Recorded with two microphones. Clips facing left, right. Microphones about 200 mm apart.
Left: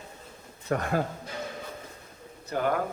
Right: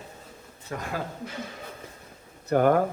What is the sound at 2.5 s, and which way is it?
Speech, 50° right (ahead or behind).